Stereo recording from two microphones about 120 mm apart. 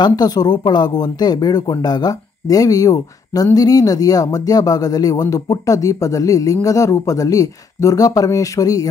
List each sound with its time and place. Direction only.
0.0 s speech: 35° left (ahead or behind)